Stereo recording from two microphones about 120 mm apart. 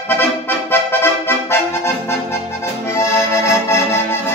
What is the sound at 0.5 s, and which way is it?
Accordion, 20° left (ahead or behind).